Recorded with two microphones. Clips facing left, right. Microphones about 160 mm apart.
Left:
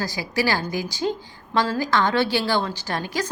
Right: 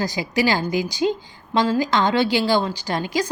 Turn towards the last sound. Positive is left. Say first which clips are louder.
# right 4 dB
turn(degrees=-15)  # may be behind; listen again after turning